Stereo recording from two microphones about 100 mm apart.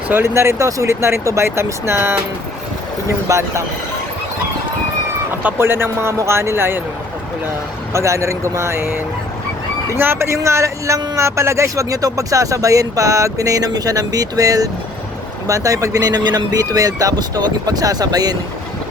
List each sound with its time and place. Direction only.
0.1 s speech: 25° right (ahead or behind)
3.2 s speech: 30° right (ahead or behind)
5.4 s speech: 20° right (ahead or behind)
7.9 s speech: 30° right (ahead or behind)
10.0 s speech: 25° right (ahead or behind); by 18.3 s 40° right (ahead or behind)